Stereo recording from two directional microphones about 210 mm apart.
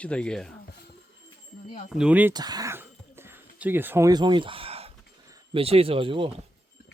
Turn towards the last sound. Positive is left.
turn(degrees=-25)  # may be behind; listen again after turning